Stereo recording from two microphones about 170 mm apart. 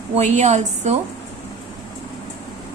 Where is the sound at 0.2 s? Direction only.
45° right (ahead or behind).